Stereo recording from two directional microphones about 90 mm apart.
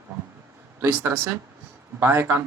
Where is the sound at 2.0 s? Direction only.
25° right (ahead or behind).